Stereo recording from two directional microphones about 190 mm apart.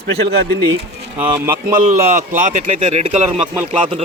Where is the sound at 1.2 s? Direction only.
10° right (ahead or behind).